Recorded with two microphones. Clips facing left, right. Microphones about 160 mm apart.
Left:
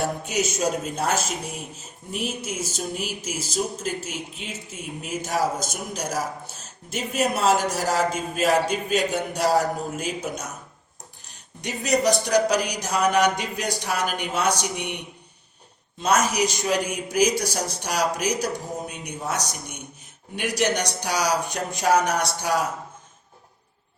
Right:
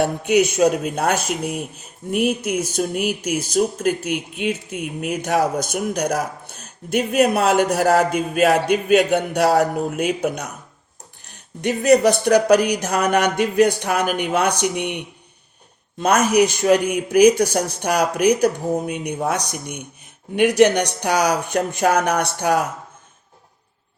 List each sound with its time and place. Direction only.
0.0 s speech: 65° right (ahead or behind)
11.6 s speech: 55° right (ahead or behind)
16.0 s speech: 55° right (ahead or behind)